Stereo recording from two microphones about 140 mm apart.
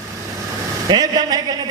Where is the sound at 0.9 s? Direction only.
30° right (ahead or behind).